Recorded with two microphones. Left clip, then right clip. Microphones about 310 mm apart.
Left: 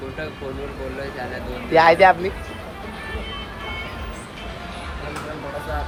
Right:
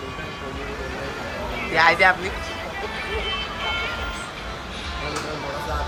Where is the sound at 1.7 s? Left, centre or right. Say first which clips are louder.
Left 4 dB; centre.